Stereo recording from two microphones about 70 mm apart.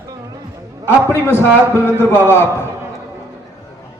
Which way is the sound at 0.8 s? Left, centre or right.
Left.